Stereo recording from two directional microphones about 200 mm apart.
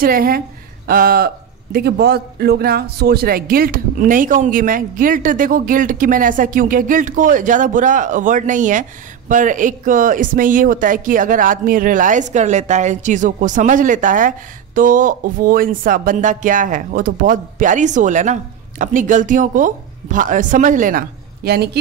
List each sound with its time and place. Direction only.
0.0 s a man's voice: 45° right (ahead or behind)
21.4 s a man's voice: 50° right (ahead or behind)